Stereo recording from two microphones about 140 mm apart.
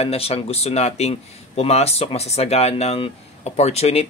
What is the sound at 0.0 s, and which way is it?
Speech, 45° left (ahead or behind).